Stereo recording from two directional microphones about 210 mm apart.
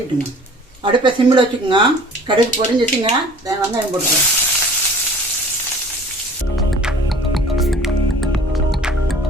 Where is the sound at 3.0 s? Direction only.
20° right (ahead or behind).